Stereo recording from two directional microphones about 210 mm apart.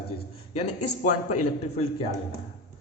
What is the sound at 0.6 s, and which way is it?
Speech, 90° left.